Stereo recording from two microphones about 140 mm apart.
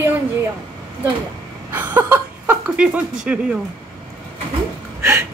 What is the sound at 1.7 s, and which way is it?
Speech, 15° right (ahead or behind).